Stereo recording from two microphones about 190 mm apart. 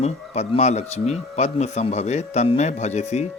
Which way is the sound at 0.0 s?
35° left (ahead or behind).